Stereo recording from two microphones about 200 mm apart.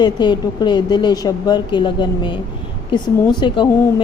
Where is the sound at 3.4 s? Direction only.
20° left (ahead or behind).